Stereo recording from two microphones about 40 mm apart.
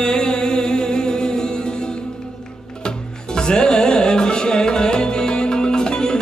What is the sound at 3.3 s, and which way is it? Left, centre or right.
Music, centre.